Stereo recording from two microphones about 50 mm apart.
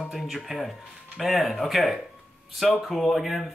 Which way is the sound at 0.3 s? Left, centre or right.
Centre.